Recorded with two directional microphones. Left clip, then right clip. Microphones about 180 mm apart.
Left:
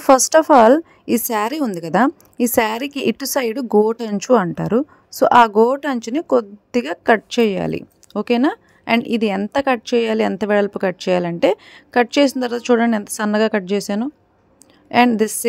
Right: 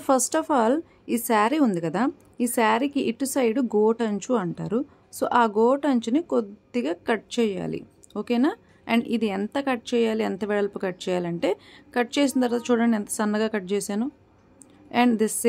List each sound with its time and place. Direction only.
0.0 s a woman's voice: 40° left (ahead or behind)